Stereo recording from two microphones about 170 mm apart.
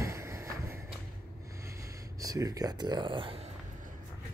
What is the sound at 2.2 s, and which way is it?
Speech, 20° right (ahead or behind).